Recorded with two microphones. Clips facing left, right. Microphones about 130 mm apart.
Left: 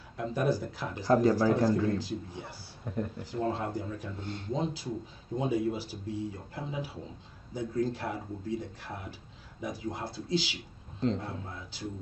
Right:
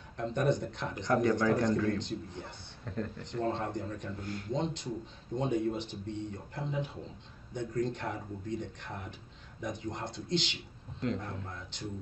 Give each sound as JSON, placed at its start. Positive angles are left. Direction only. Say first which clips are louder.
{"t": 0.2, "sound": "speech", "louder": "left 1 dB", "side_deg": 5}
{"t": 0.9, "sound": "speech", "louder": "left 4 dB", "side_deg": 30}
{"t": 2.0, "sound": "speech", "louder": "left 1 dB", "side_deg": 5}
{"t": 2.8, "sound": "speech", "louder": "left 3 dB", "side_deg": 15}
{"t": 3.3, "sound": "speech", "louder": "even", "side_deg": 5}
{"t": 4.2, "sound": "speech", "louder": "even", "side_deg": 25}
{"t": 4.5, "sound": "speech", "louder": "left 1 dB", "side_deg": 5}